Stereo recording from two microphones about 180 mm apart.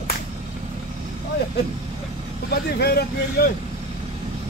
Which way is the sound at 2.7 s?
60° left (ahead or behind).